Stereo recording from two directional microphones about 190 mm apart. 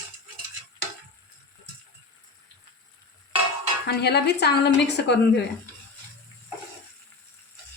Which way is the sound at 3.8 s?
60° left (ahead or behind).